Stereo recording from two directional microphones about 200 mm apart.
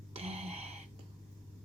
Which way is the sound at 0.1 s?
30° right (ahead or behind).